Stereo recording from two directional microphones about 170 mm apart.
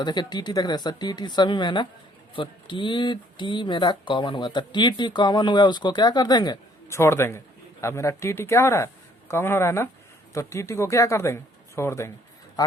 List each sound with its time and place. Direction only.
0.0 s speech: 25° left (ahead or behind)